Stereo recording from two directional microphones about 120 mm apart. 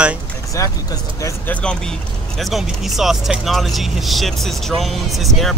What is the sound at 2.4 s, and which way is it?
Speech, centre (ahead or behind).